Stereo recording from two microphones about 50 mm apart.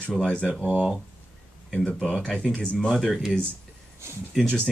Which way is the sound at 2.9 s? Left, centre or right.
Centre.